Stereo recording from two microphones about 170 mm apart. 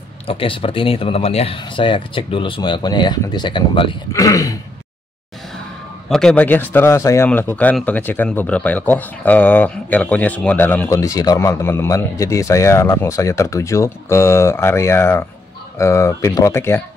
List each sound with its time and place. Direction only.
0.3 s speech: 30° left (ahead or behind)
6.0 s a man's voice: 5° left (ahead or behind)